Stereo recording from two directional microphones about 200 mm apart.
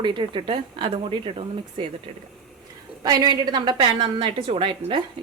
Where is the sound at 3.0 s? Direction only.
20° right (ahead or behind).